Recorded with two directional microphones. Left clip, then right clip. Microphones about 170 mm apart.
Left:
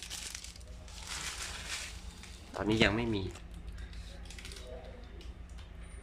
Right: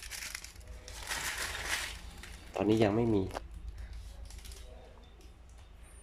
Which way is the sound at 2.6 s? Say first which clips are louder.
Right 1 dB; 25° right (ahead or behind).